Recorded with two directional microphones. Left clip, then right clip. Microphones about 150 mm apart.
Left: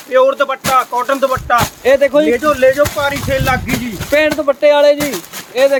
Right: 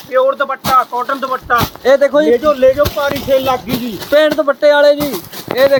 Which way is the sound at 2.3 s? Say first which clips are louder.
Right 1 dB; 35° left (ahead or behind).